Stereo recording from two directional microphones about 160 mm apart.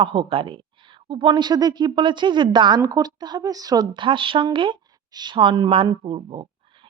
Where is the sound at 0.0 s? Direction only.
35° right (ahead or behind).